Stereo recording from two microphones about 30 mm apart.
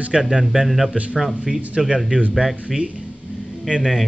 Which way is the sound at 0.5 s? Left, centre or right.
Right.